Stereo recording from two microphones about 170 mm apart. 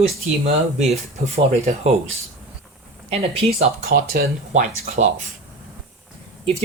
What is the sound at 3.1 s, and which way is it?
Speech, 35° right (ahead or behind).